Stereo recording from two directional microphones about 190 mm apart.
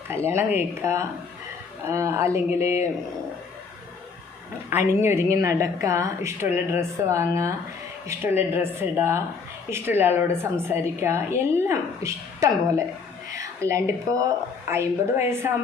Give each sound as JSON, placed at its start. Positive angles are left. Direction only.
{"t": 0.1, "sound": "a woman's voice", "side_deg": -10}
{"t": 4.7, "sound": "a woman's voice", "side_deg": -15}